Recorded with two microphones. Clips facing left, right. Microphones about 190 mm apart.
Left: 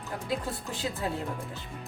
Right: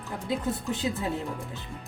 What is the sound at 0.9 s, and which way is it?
Speech, 20° right (ahead or behind).